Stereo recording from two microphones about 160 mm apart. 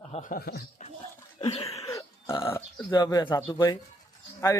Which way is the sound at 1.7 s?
20° left (ahead or behind).